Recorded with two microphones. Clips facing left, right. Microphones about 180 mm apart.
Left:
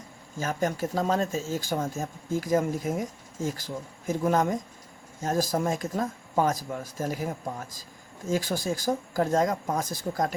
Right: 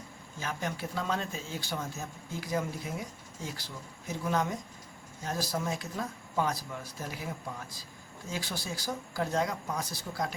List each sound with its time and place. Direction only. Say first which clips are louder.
0.3 s speech: left 8 dB; 45° left (ahead or behind)